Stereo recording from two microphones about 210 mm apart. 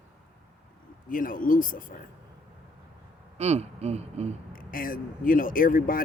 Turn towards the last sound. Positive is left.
turn(degrees=40)  # may be behind; listen again after turning